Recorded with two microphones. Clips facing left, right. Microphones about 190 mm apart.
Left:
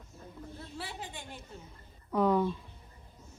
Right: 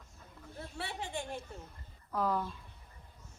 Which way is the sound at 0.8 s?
Centre (ahead or behind).